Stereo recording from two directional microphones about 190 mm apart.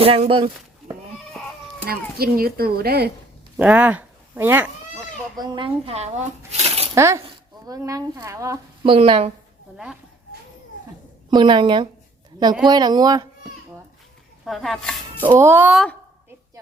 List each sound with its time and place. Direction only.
0.0 s speech: 30° right (ahead or behind)
1.8 s speech: 55° right (ahead or behind)
3.6 s speech: 10° right (ahead or behind)
5.4 s speech: 25° right (ahead or behind)
6.5 s a sound: 35° right (ahead or behind)
6.9 s speech: 15° right (ahead or behind)
8.8 s speech: 30° right (ahead or behind)
9.7 s speech: 5° right (ahead or behind)
11.3 s speech: 25° right (ahead or behind)
14.4 s speech: centre (ahead or behind)
15.3 s speech: 15° right (ahead or behind)